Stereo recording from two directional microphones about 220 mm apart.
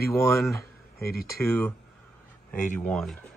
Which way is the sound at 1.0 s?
45° left (ahead or behind).